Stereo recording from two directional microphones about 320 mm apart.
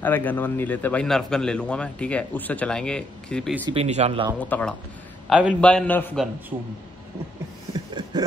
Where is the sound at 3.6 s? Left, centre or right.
Centre.